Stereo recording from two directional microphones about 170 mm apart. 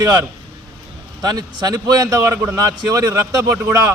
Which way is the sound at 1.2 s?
25° right (ahead or behind).